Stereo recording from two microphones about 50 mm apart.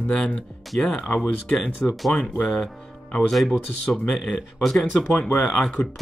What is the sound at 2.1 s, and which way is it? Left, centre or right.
Speech, left.